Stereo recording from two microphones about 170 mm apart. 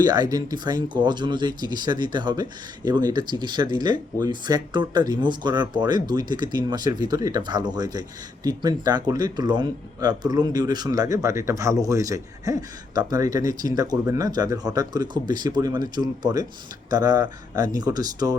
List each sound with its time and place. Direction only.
0.0 s speech: 25° right (ahead or behind)